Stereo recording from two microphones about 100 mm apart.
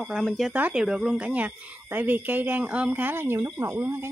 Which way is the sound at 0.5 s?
15° right (ahead or behind).